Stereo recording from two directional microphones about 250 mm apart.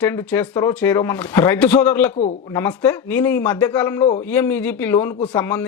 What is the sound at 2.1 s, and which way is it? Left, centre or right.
Speech, left.